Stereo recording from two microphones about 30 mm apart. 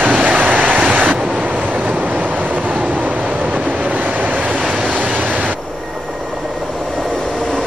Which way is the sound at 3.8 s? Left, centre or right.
Right.